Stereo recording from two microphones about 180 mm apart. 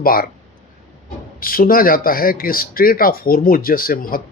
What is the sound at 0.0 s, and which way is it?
Speech, 55° left (ahead or behind).